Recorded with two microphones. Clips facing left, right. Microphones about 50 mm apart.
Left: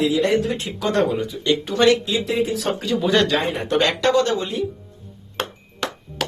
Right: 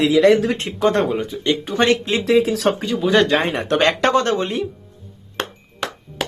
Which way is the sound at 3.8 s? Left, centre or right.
Right.